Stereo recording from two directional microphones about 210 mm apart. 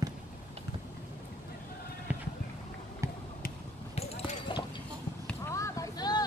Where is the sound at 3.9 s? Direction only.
30° left (ahead or behind).